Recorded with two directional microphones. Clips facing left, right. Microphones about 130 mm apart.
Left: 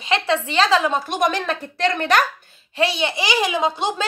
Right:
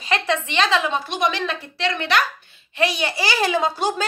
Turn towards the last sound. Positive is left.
turn(degrees=20)  # may be behind; listen again after turning